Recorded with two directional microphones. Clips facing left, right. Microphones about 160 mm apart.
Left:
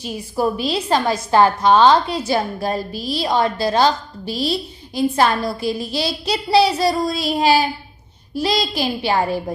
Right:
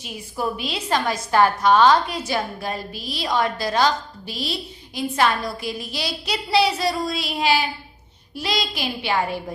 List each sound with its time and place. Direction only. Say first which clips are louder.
0.0 s a woman's voice: left 6 dB; 35° left (ahead or behind)